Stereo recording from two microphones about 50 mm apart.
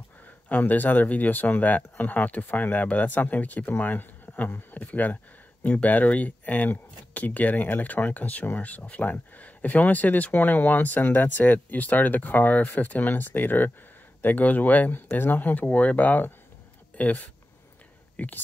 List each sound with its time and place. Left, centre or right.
0.5 s speech: left
15.7 s speech: left